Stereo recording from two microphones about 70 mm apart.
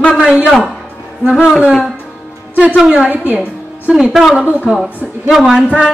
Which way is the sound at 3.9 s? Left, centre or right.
Centre.